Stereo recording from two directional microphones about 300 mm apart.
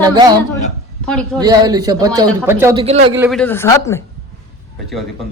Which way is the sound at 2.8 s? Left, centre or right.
Centre.